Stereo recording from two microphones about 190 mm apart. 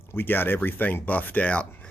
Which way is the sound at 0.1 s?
10° left (ahead or behind).